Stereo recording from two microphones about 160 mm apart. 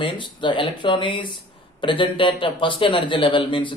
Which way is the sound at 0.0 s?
30° left (ahead or behind).